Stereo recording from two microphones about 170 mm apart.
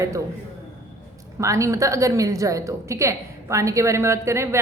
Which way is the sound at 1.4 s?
20° right (ahead or behind).